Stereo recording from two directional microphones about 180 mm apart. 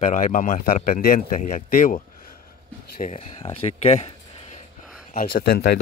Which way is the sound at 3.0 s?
40° left (ahead or behind).